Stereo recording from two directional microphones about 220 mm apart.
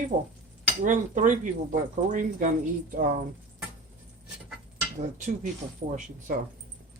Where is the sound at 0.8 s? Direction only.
35° right (ahead or behind).